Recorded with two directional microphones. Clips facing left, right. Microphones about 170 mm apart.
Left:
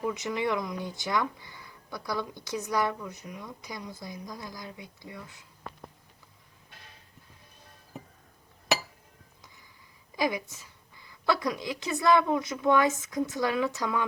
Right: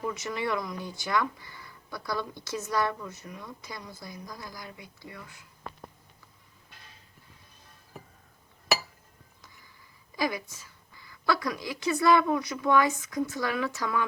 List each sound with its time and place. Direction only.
0.0 s speech: 15° left (ahead or behind)
10.2 s speech: 20° left (ahead or behind)